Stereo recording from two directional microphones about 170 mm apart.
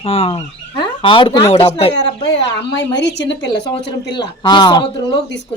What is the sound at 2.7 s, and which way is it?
Speech, 90° left.